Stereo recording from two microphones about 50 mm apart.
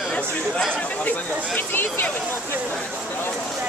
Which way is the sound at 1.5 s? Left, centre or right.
Left.